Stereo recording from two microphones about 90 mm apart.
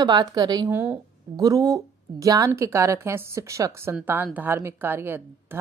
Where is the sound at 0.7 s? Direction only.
25° right (ahead or behind).